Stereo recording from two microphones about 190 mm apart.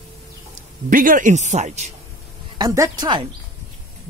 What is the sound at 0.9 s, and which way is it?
Speech, 45° right (ahead or behind).